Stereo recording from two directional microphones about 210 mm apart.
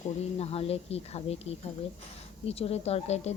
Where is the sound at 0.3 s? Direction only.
30° left (ahead or behind).